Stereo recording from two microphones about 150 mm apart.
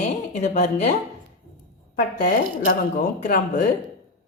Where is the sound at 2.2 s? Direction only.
65° left (ahead or behind).